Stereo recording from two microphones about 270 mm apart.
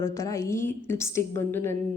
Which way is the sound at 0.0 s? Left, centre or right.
Centre.